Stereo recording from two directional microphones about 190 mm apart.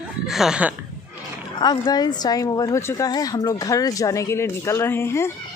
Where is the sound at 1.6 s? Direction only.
25° left (ahead or behind).